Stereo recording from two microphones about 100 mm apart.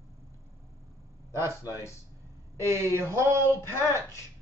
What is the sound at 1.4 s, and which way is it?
Male singing, 30° left (ahead or behind).